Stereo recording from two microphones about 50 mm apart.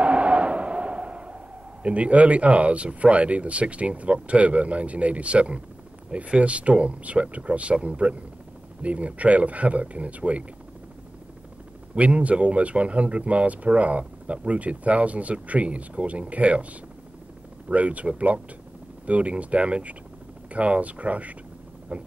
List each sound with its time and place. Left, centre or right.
0.0 s a sound: right
1.8 s speech: right
11.9 s speech: right
17.6 s speech: right